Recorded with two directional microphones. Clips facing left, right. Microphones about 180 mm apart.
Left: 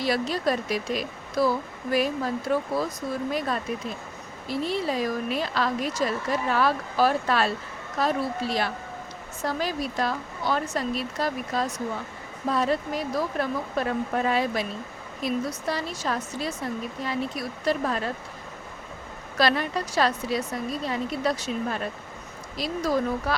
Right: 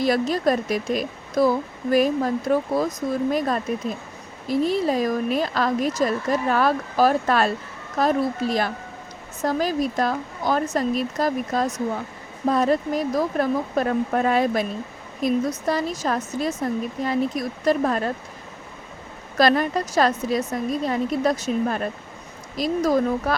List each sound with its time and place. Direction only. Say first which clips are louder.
0.0 s a woman's voice: right 5 dB; 45° right (ahead or behind)
19.4 s a woman's voice: right 5 dB; 45° right (ahead or behind)